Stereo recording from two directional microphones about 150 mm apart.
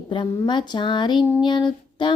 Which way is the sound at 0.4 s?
30° left (ahead or behind).